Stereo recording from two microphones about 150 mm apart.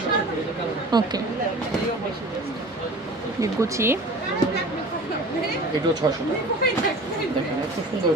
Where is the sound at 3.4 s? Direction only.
20° right (ahead or behind).